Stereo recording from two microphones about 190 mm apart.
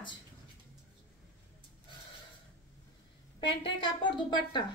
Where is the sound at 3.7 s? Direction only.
25° left (ahead or behind).